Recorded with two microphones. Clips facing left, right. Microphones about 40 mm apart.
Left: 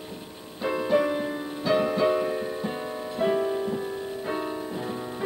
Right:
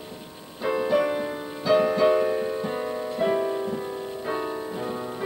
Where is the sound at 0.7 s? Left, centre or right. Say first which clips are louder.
Right 1 dB; centre.